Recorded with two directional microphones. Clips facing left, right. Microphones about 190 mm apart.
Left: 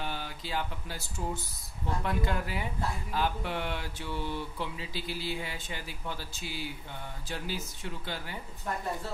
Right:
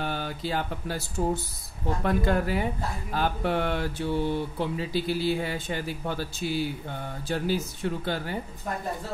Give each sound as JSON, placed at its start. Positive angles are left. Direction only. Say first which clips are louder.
{"t": 0.0, "sound": "speech", "louder": "right 7 dB", "side_deg": -50}
{"t": 2.0, "sound": "speech", "louder": "right 9 dB", "side_deg": -50}
{"t": 4.0, "sound": "mantra", "louder": "right 10 dB", "side_deg": -30}
{"t": 4.3, "sound": "speech", "louder": "right 8 dB", "side_deg": -50}